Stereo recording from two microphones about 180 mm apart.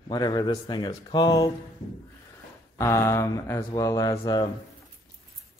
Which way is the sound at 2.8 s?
15° left (ahead or behind).